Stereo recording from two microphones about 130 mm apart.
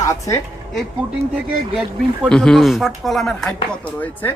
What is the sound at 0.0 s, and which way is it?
Speech, 25° left (ahead or behind).